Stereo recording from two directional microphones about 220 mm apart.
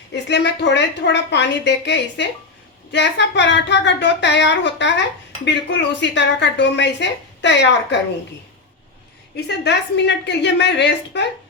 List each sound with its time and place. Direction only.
0.1 s a woman's voice: 50° left (ahead or behind)
9.3 s a woman's voice: 50° left (ahead or behind)